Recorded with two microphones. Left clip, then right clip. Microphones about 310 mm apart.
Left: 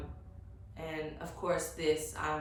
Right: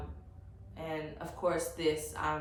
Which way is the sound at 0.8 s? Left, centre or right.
Centre.